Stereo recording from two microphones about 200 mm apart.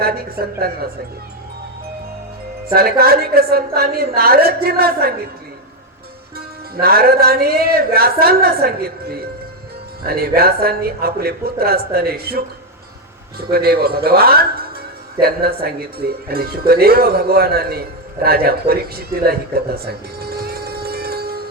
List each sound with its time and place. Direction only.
0.0 s speech: 50° right (ahead or behind)
2.7 s speech: 50° right (ahead or behind)
6.3 s speech: 50° right (ahead or behind)
13.5 s speech: 50° right (ahead or behind)